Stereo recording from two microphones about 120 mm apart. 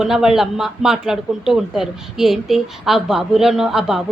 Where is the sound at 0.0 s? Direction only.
5° right (ahead or behind).